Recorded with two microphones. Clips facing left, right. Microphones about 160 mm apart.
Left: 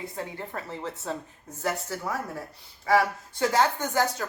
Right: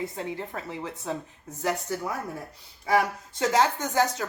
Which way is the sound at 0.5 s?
15° right (ahead or behind).